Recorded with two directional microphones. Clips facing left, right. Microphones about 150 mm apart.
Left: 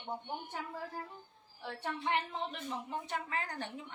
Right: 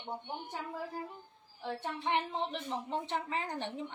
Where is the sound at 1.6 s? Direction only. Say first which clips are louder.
Right 1 dB; 20° right (ahead or behind).